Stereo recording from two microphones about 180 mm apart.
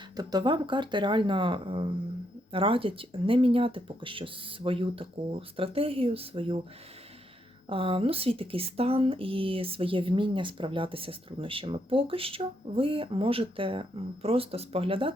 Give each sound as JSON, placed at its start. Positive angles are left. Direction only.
{"t": 0.2, "sound": "speech", "side_deg": -20}
{"t": 7.7, "sound": "speech", "side_deg": -30}